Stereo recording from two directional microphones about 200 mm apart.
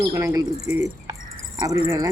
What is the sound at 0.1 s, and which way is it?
Speech, 15° right (ahead or behind).